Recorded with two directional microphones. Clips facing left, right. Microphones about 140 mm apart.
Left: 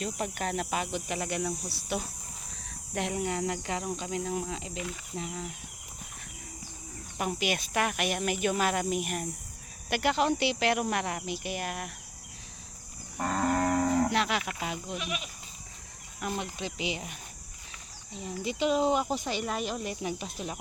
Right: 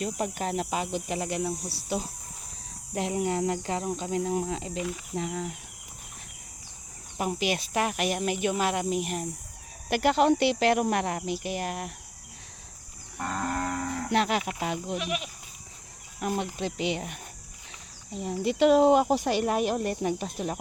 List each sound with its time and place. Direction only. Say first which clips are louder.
0.0 s speech: right 3 dB; 35° right (ahead or behind)
3.2 s speech: right 4 dB; 40° right (ahead or behind)
7.3 s speech: right 2 dB; 35° right (ahead or behind)
9.9 s speech: right 5 dB; 45° right (ahead or behind)
13.3 s cattle: left 4 dB; 20° left (ahead or behind)
14.1 s speech: right 3 dB; 45° right (ahead or behind)
16.6 s speech: right 5 dB; 55° right (ahead or behind)